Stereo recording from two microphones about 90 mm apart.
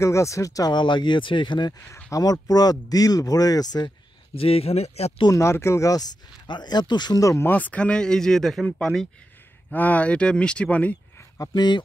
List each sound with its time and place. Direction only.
0.0 s speech: 35° left (ahead or behind)
0.7 s speech: 60° left (ahead or behind)
2.0 s speech: 40° left (ahead or behind)
4.4 s speech: 90° left
5.3 s speech: 30° left (ahead or behind)
6.4 s speech: 55° left (ahead or behind)
7.2 s speech: 35° left (ahead or behind)
7.4 s speech: 20° left (ahead or behind)
9.7 s speech: 15° left (ahead or behind)
11.3 s speech: 45° left (ahead or behind)